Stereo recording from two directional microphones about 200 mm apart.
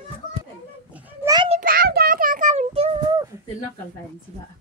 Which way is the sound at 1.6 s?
45° right (ahead or behind).